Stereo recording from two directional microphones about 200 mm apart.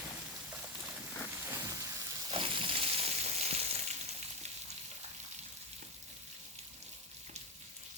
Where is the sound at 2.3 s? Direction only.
25° right (ahead or behind).